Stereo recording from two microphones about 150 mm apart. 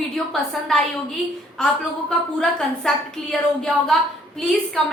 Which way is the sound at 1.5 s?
5° left (ahead or behind).